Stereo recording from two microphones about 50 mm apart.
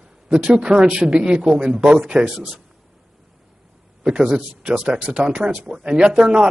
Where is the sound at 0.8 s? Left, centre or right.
Right.